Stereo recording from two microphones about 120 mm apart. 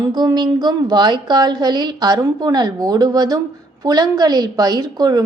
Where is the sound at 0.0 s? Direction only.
35° right (ahead or behind).